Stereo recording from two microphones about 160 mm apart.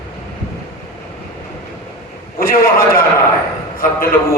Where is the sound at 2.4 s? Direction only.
65° left (ahead or behind).